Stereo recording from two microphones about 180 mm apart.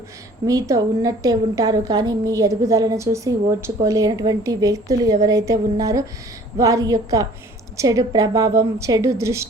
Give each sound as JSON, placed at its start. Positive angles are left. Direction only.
{"t": 0.4, "sound": "a woman's voice", "side_deg": -20}